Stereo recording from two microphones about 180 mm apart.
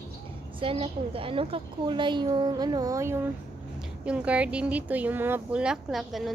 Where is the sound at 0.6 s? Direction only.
30° right (ahead or behind).